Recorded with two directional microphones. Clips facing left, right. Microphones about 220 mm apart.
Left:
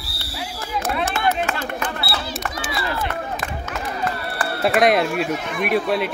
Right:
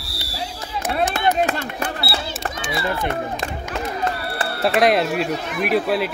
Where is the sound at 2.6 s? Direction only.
25° right (ahead or behind).